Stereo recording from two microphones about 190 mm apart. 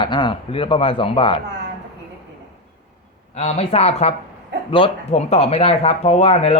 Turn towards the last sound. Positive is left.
turn(degrees=35)  # may be behind; listen again after turning